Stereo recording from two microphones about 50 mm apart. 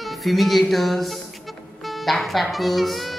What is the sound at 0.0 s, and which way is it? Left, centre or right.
Speech, centre.